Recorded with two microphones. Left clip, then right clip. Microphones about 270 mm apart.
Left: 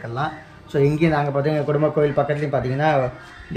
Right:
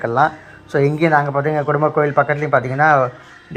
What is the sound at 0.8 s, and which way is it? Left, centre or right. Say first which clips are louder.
Speech: right 5 dB; centre.